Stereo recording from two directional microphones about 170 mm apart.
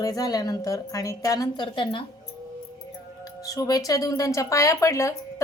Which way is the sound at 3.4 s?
20° left (ahead or behind).